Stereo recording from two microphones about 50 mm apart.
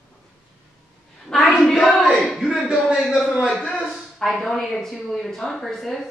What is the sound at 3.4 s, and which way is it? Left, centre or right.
Speech, left.